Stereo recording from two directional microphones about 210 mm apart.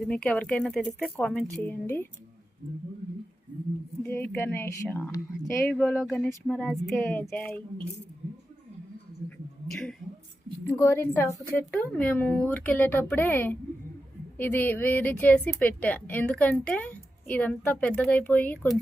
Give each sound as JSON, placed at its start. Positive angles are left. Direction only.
{"t": 0.1, "sound": "speech", "side_deg": 5}
{"t": 4.0, "sound": "a woman's voice", "side_deg": 10}
{"t": 5.9, "sound": "speech", "side_deg": 5}
{"t": 10.7, "sound": "a woman's voice", "side_deg": 10}